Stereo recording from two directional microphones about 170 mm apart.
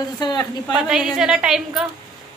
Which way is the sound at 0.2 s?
25° left (ahead or behind).